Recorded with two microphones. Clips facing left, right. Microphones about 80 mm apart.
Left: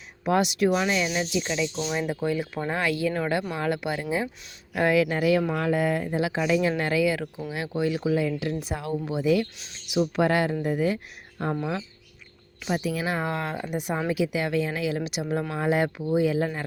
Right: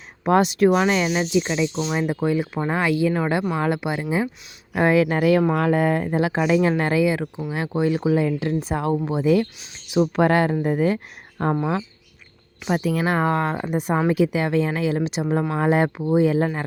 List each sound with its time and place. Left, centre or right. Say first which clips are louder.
0.3 s speech: right 5 dB; right
1.3 s speech: right 6 dB; right
5.1 s speech: right 5 dB; right
12.6 s speech: right 5 dB; right